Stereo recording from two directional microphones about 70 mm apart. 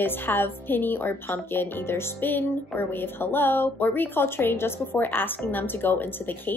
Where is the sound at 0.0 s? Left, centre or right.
Left.